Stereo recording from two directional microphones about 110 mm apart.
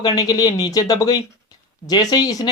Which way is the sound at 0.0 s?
35° left (ahead or behind).